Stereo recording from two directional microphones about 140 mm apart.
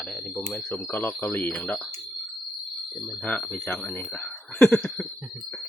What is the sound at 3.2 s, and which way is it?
Speech, 10° left (ahead or behind).